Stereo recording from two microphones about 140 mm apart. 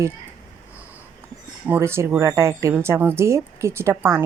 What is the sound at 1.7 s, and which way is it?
Speech, 15° right (ahead or behind).